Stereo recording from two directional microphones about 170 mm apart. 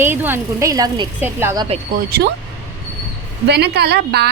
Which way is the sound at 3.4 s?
70° right (ahead or behind).